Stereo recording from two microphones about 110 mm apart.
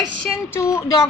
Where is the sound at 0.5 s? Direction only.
25° left (ahead or behind).